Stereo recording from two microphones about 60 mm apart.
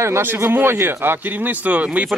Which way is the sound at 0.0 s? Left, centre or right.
Right.